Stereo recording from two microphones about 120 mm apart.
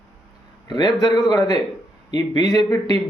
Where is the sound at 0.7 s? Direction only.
35° left (ahead or behind).